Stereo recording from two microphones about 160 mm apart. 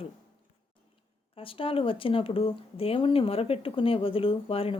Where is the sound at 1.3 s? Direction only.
35° left (ahead or behind).